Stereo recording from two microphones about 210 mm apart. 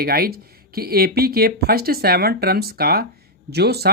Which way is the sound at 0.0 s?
45° right (ahead or behind).